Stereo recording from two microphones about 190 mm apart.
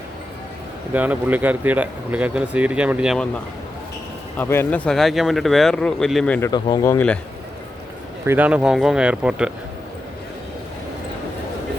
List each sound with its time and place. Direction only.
0.9 s speech: 10° right (ahead or behind)
4.4 s speech: 10° left (ahead or behind)
6.5 s speech: 20° left (ahead or behind)
8.3 s speech: 5° right (ahead or behind)